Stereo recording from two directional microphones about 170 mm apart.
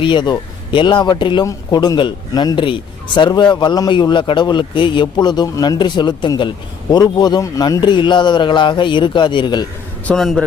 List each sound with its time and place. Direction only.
0.0 s speech: 25° left (ahead or behind)
10.1 s a man's voice: centre (ahead or behind)